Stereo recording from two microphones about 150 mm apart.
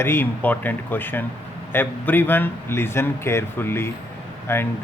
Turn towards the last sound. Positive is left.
turn(degrees=15)  # may be behind; listen again after turning